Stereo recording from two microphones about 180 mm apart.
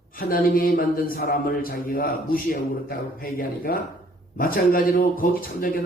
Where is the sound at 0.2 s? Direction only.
55° left (ahead or behind).